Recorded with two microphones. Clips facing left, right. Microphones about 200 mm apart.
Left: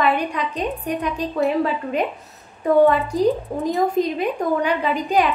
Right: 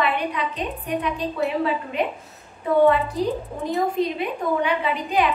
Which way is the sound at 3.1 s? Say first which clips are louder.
Left 5 dB; 40° left (ahead or behind).